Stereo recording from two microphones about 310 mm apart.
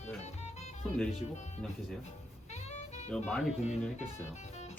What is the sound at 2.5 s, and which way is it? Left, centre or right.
Music, left.